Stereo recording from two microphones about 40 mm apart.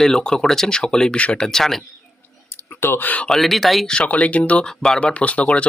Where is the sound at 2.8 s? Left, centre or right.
Left.